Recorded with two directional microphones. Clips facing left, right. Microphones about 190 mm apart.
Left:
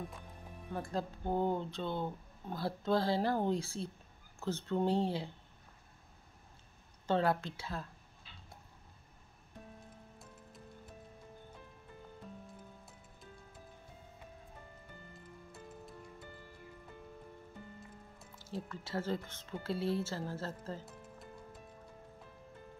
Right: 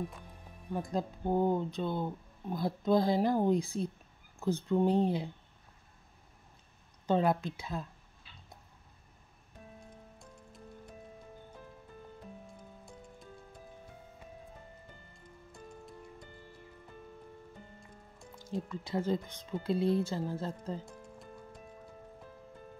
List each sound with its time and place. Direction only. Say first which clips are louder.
0.7 s speech: right 4 dB; 15° right (ahead or behind)
7.1 s speech: right 3 dB; 15° right (ahead or behind)
15.5 s music: right 3 dB; 5° left (ahead or behind)
18.4 s speech: right 5 dB; 15° right (ahead or behind)